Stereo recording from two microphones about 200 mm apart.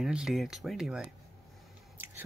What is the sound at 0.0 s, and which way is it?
Speech, centre (ahead or behind).